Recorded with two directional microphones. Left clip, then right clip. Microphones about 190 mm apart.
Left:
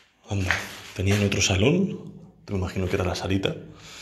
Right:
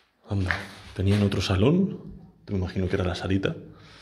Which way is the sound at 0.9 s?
35° right (ahead or behind).